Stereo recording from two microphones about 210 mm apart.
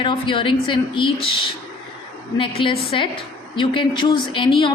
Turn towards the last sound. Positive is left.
turn(degrees=25)  # may be behind; listen again after turning